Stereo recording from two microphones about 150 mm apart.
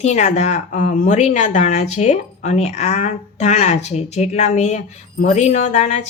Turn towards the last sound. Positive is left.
turn(degrees=50)  # may be behind; listen again after turning